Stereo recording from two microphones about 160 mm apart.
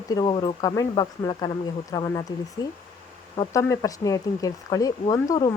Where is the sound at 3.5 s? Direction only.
20° left (ahead or behind).